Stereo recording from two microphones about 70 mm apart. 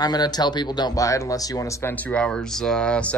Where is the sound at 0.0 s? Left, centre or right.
Left.